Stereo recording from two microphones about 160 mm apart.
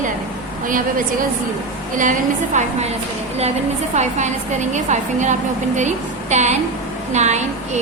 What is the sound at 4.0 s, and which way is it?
A woman's voice, 45° right (ahead or behind).